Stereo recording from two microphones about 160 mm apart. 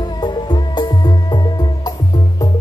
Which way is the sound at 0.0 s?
25° left (ahead or behind).